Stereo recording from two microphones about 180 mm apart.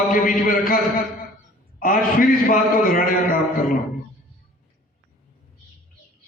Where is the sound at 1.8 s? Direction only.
50° left (ahead or behind).